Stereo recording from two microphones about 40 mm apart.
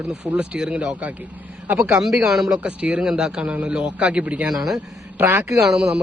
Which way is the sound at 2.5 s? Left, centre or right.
Right.